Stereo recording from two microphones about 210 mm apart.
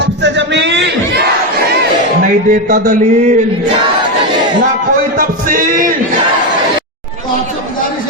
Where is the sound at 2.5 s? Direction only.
45° right (ahead or behind).